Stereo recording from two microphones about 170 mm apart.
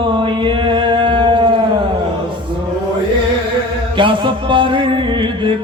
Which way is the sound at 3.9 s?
30° right (ahead or behind).